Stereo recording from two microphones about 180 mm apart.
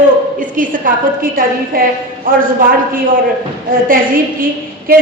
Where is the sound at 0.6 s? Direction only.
50° right (ahead or behind).